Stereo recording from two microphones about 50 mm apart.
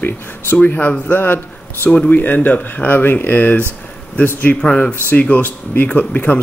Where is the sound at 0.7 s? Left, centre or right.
Left.